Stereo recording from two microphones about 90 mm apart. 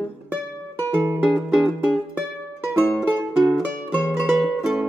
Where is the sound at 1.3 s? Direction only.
Centre (ahead or behind).